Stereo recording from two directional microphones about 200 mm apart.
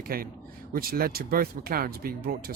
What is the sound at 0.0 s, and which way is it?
Speech, 45° right (ahead or behind).